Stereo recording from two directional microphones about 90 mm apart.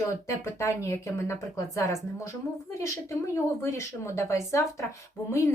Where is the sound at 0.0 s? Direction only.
35° left (ahead or behind).